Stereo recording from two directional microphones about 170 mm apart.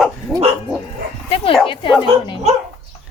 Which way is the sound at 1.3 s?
35° left (ahead or behind).